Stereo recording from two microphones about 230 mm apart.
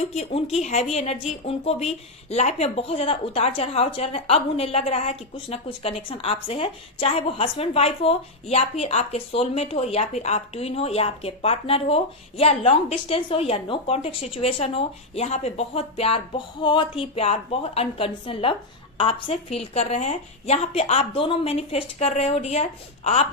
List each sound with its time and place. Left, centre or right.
0.1 s a woman's voice: left